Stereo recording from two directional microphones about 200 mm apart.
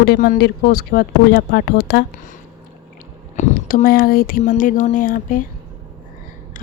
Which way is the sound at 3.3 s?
35° left (ahead or behind).